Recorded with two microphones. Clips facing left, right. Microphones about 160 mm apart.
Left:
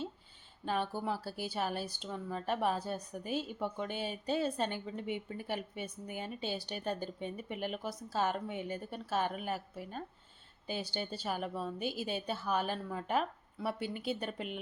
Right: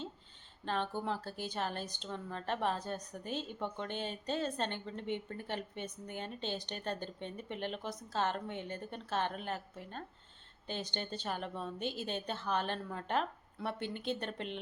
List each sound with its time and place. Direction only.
0.6 s a woman's voice: 10° left (ahead or behind)